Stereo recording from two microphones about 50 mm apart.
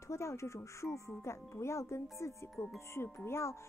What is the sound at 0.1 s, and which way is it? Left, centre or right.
A woman's voice, left.